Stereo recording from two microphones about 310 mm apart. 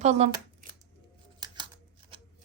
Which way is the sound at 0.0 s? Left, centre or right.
Right.